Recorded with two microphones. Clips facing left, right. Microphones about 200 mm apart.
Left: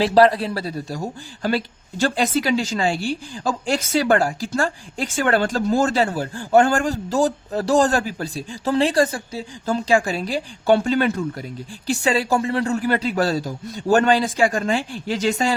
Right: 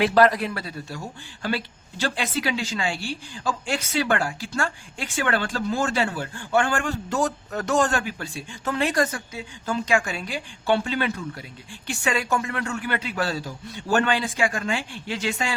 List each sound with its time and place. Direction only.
0.0 s speech: 30° left (ahead or behind)
11.9 s speech: 35° left (ahead or behind)